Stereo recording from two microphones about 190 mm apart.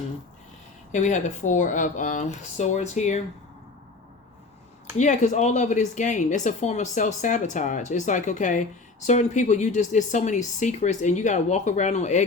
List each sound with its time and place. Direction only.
0.9 s speech: 40° left (ahead or behind)
4.9 s speech: 40° left (ahead or behind)